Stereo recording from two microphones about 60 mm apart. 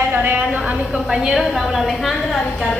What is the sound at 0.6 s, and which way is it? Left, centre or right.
A woman's voice, centre.